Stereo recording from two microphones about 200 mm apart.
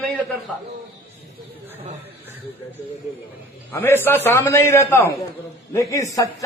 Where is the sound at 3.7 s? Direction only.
10° left (ahead or behind).